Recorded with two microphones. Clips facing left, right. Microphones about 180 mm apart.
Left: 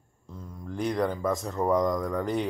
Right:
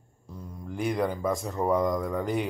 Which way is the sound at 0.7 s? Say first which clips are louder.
Even; 5° right (ahead or behind).